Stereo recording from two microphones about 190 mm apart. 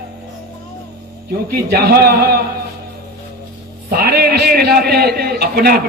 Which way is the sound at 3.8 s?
55° right (ahead or behind).